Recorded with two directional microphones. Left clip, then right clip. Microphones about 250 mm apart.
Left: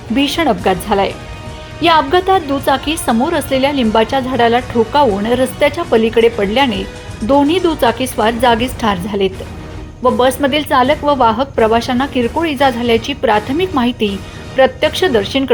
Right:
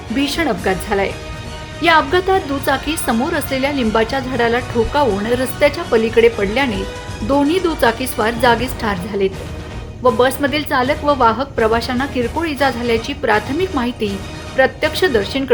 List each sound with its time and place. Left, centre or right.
0.2 s a woman's voice: centre